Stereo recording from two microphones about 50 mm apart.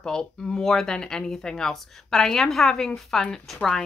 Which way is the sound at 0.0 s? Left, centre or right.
Centre.